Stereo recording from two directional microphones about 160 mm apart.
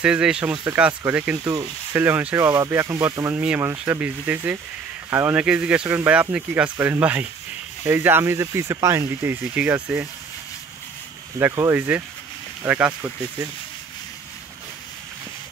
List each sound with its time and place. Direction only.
0.0 s speech: 5° right (ahead or behind)
11.3 s speech: 20° right (ahead or behind)